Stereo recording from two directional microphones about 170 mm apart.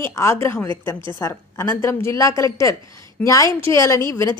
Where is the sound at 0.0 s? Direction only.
15° left (ahead or behind).